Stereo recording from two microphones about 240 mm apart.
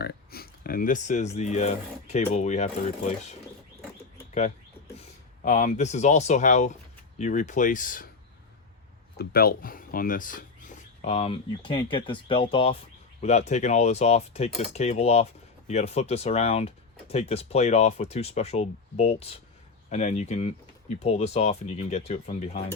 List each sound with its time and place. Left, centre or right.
0.0 s speech: left
5.5 s speech: left
9.1 s speech: left